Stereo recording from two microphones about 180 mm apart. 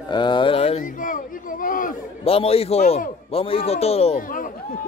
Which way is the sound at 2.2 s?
35° left (ahead or behind).